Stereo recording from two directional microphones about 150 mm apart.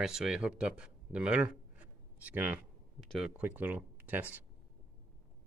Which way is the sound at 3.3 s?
10° right (ahead or behind).